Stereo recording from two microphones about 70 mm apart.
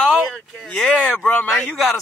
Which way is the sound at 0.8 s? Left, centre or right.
Centre.